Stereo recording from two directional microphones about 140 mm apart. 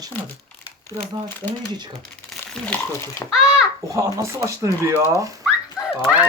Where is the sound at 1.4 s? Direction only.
15° right (ahead or behind).